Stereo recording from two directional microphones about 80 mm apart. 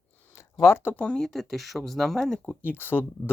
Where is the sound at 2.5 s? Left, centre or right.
Left.